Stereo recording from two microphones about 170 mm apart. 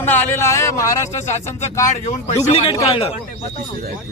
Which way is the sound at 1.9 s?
40° left (ahead or behind).